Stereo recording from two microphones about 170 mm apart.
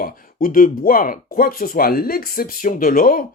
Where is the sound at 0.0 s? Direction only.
55° left (ahead or behind).